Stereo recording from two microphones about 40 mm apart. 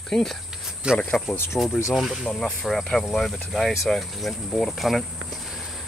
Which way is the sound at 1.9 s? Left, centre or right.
Centre.